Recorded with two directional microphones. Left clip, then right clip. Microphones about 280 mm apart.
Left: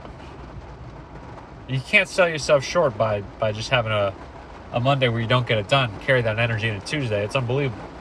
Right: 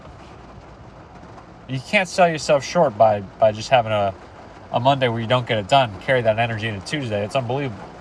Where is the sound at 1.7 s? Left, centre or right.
Centre.